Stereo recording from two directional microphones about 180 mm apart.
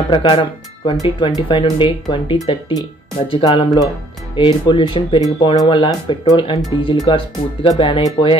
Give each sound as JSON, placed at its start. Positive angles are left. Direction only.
{"t": 0.1, "sound": "speech", "side_deg": 30}